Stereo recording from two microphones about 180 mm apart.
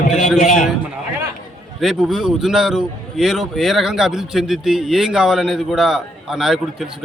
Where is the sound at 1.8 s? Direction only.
Centre (ahead or behind).